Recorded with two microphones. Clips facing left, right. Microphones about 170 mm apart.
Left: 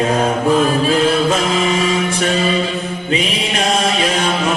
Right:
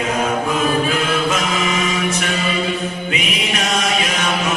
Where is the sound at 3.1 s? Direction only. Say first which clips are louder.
Left 7 dB; 30° left (ahead or behind).